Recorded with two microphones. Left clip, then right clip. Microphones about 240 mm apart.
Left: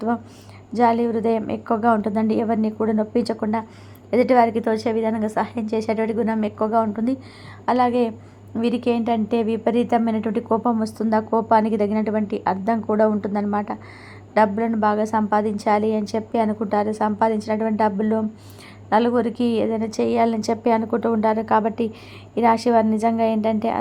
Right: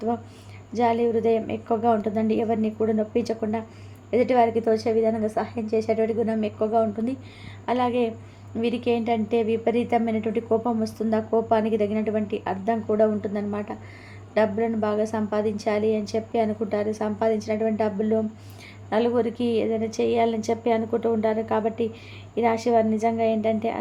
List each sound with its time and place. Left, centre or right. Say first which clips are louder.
0.7 s a woman's voice: left 3 dB; left